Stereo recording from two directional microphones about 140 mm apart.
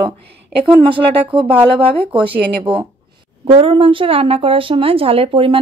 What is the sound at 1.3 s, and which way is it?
A woman's voice, 35° right (ahead or behind).